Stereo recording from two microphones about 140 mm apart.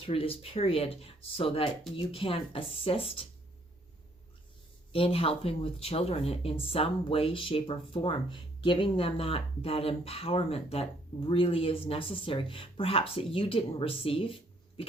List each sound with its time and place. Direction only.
0.0 s speech: 40° left (ahead or behind)
4.9 s speech: 40° left (ahead or behind)